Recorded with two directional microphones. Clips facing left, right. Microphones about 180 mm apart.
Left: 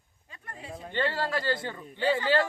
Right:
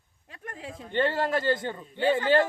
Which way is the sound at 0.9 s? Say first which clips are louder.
Right 4 dB; 20° right (ahead or behind).